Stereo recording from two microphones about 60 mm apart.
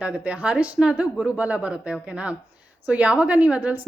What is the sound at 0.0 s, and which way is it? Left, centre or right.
A woman's voice, centre.